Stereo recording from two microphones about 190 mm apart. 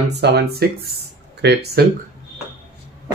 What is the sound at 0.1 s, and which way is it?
Speech, 60° right (ahead or behind).